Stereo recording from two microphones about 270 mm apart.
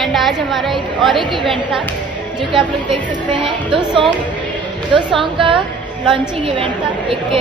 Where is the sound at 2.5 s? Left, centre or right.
Centre.